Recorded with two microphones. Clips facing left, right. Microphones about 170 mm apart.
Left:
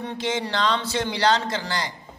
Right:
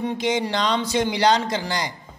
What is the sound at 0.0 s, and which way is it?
A man's voice, 15° right (ahead or behind).